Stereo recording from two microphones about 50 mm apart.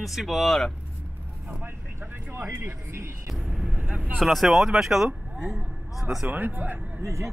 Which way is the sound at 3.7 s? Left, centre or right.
Right.